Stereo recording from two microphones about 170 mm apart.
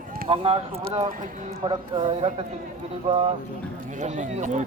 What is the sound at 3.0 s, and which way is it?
Speech, 35° right (ahead or behind).